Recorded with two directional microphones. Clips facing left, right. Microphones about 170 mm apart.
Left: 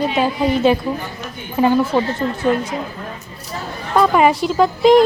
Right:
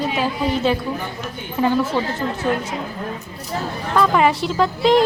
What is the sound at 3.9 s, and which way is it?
Speech, 15° left (ahead or behind).